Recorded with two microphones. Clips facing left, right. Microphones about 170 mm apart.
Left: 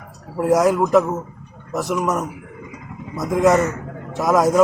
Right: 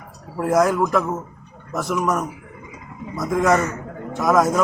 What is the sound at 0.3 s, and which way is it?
Speech, 15° left (ahead or behind).